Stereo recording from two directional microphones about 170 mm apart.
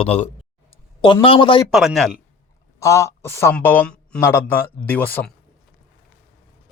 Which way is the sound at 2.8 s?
15° left (ahead or behind).